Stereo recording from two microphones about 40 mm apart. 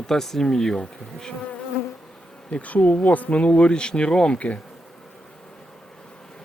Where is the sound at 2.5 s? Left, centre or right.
Left.